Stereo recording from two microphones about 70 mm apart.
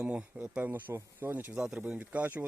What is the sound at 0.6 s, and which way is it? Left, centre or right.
Speech, right.